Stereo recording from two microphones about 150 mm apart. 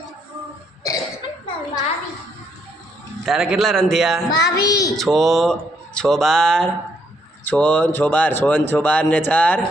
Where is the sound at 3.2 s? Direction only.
Centre (ahead or behind).